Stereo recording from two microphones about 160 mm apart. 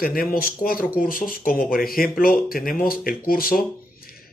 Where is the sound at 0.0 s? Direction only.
65° left (ahead or behind).